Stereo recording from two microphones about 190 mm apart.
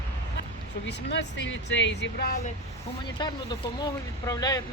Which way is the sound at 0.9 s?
65° left (ahead or behind).